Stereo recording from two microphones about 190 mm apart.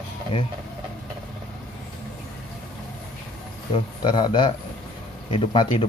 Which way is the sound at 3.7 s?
25° left (ahead or behind).